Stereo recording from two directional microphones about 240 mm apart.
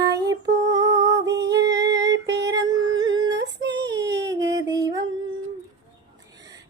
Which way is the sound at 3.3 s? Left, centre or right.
Right.